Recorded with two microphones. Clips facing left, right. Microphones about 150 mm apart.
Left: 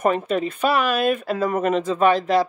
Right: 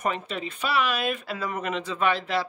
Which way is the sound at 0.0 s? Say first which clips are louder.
Left 9 dB; 50° left (ahead or behind).